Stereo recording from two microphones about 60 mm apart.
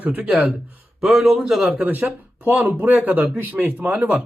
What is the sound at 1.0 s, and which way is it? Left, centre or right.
Speech, centre.